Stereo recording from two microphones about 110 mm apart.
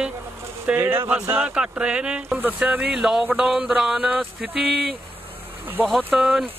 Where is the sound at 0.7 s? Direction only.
20° right (ahead or behind).